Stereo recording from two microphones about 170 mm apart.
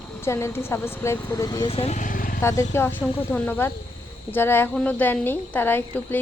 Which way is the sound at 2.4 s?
15° left (ahead or behind).